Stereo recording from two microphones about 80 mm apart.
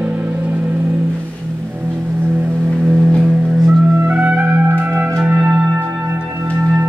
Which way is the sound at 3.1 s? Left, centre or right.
Centre.